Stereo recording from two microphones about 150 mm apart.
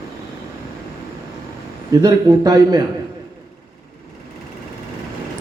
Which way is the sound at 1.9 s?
25° right (ahead or behind).